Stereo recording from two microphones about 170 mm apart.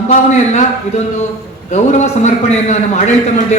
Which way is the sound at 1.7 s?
45° left (ahead or behind).